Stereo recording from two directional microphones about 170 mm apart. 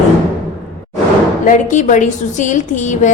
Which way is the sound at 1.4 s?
50° left (ahead or behind).